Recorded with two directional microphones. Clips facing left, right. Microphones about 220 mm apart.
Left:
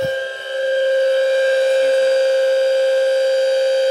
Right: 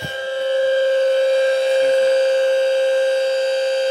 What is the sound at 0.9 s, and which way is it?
Civil defense siren, 10° left (ahead or behind).